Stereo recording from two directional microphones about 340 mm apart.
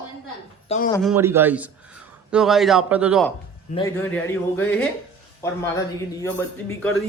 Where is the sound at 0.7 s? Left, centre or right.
Centre.